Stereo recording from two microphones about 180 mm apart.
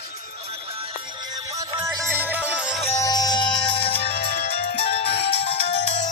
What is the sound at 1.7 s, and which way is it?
Music, 20° right (ahead or behind).